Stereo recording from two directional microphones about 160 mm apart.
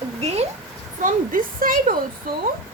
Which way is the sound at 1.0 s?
60° right (ahead or behind).